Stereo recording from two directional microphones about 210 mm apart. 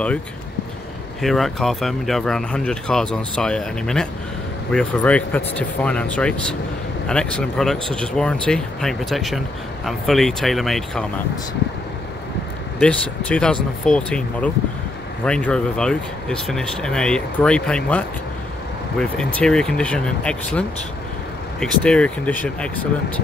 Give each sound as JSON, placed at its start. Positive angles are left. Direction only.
{"t": 1.2, "sound": "speech", "side_deg": 0}
{"t": 12.7, "sound": "speech", "side_deg": 5}